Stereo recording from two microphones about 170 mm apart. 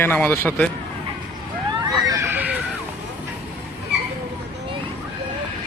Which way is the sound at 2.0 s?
20° right (ahead or behind).